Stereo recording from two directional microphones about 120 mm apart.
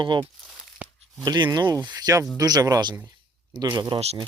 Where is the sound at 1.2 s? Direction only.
35° right (ahead or behind).